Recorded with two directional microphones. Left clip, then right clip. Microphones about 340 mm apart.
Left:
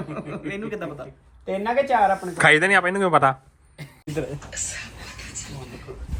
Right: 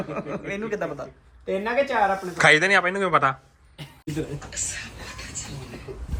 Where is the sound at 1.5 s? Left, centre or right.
Left.